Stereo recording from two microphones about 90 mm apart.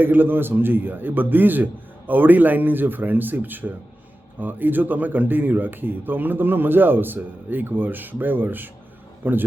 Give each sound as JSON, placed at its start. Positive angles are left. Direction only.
{"t": 0.0, "sound": "speech", "side_deg": -20}